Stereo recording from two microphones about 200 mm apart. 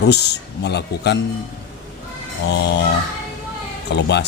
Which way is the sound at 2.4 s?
60° left (ahead or behind).